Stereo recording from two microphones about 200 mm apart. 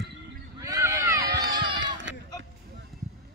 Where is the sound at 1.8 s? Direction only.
65° right (ahead or behind).